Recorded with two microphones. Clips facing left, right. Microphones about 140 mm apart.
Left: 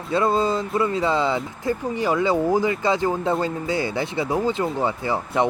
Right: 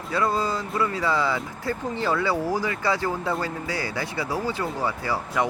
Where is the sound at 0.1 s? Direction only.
25° left (ahead or behind).